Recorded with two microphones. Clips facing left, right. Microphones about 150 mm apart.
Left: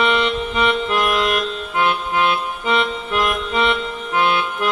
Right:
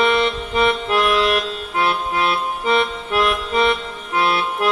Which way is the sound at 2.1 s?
35° right (ahead or behind).